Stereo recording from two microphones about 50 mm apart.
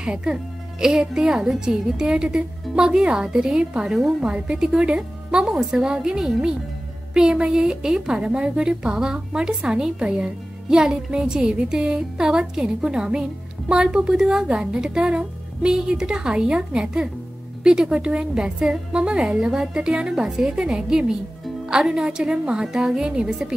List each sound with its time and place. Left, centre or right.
0.0 s a woman's voice: centre
4.2 s a woman's voice: centre
5.5 s a woman's voice: centre